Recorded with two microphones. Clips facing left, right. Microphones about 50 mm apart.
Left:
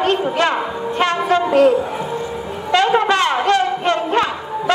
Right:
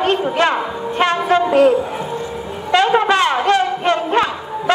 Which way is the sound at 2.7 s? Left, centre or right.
Right.